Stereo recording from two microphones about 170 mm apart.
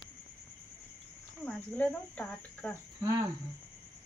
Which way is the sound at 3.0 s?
20° right (ahead or behind).